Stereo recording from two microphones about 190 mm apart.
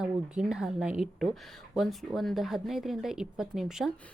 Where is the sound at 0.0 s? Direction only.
5° right (ahead or behind).